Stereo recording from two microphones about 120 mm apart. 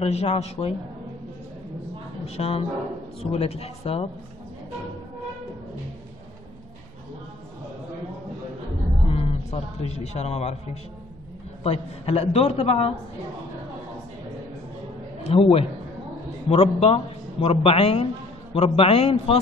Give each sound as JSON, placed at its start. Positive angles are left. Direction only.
{"t": 0.0, "sound": "a man's voice", "side_deg": 60}
{"t": 2.2, "sound": "a man's voice", "side_deg": 55}
{"t": 9.1, "sound": "a man's voice", "side_deg": 55}
{"t": 15.2, "sound": "a man's voice", "side_deg": 55}